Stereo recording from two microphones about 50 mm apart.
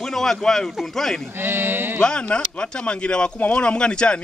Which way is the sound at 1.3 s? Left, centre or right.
Right.